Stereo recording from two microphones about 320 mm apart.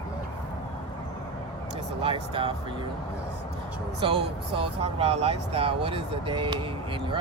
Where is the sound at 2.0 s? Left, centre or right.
Centre.